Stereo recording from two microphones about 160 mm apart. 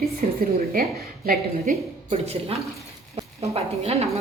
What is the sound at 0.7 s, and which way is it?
A woman's voice, 65° right (ahead or behind).